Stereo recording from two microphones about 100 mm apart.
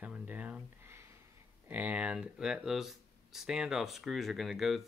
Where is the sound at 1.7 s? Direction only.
15° right (ahead or behind).